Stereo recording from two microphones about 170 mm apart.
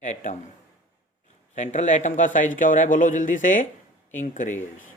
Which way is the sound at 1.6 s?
45° left (ahead or behind).